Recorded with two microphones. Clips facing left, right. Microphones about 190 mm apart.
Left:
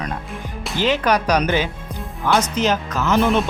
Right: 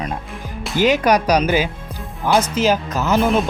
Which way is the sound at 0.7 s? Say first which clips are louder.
Right 3 dB; 10° right (ahead or behind).